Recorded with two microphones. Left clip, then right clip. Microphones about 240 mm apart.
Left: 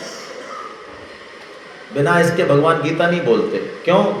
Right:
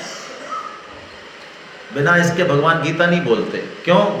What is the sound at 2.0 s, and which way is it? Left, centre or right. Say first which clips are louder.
A man's voice: even; right.